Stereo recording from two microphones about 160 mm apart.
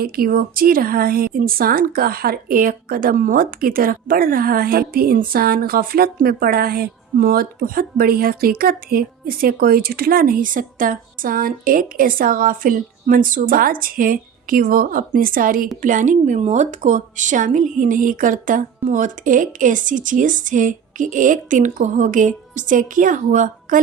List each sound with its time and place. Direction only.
0.0 s a woman's voice: 65° right (ahead or behind)